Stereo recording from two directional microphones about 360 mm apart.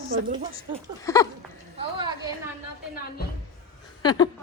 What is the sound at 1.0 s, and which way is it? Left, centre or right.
Speech, centre.